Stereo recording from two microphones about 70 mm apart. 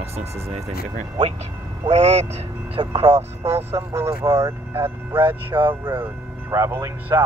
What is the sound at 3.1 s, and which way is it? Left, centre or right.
Speech, right.